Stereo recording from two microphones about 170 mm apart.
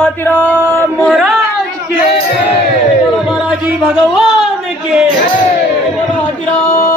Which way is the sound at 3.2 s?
5° right (ahead or behind).